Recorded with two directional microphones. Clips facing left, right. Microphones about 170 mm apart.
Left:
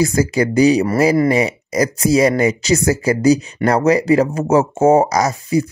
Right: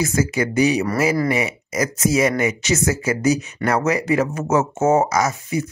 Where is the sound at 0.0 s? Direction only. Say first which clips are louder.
Left 5 dB; 35° left (ahead or behind).